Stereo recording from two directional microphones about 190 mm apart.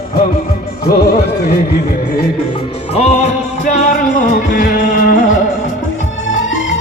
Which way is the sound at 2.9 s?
35° left (ahead or behind).